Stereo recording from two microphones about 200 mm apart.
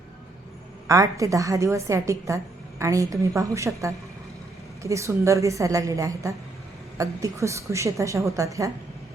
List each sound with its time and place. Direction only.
0.9 s a woman's voice: 15° right (ahead or behind)
4.8 s a woman's voice: 15° right (ahead or behind)